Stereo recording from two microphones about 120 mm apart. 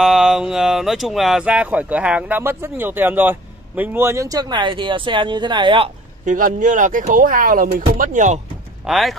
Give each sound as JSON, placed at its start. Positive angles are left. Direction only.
{"t": 0.0, "sound": "speech", "side_deg": -5}
{"t": 6.2, "sound": "speech", "side_deg": -90}
{"t": 8.8, "sound": "speech", "side_deg": 0}